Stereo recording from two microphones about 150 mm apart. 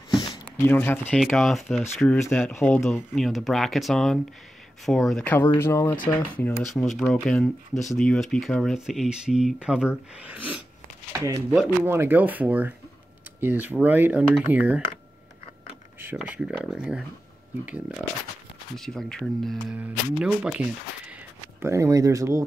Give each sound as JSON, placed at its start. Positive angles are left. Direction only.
{"t": 0.7, "sound": "speech", "side_deg": 15}
{"t": 1.2, "sound": "speech", "side_deg": 0}
{"t": 2.1, "sound": "speech", "side_deg": 15}
{"t": 2.5, "sound": "speech", "side_deg": 5}
{"t": 6.7, "sound": "speech", "side_deg": 0}
{"t": 11.8, "sound": "speech", "side_deg": -15}
{"t": 16.2, "sound": "speech", "side_deg": -5}
{"t": 18.8, "sound": "speech", "side_deg": 5}
{"t": 21.5, "sound": "speech", "side_deg": -20}